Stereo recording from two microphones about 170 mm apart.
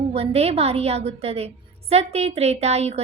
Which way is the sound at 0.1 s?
35° right (ahead or behind).